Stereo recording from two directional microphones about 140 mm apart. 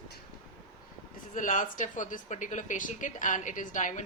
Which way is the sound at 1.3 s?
70° left (ahead or behind).